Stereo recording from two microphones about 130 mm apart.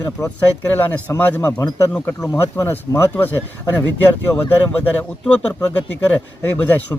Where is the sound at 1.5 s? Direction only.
25° left (ahead or behind).